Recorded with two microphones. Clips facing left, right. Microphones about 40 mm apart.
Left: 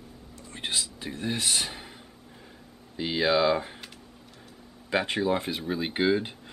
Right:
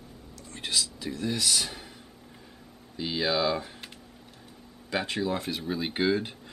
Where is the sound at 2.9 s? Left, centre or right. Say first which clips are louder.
Left 3 dB; left.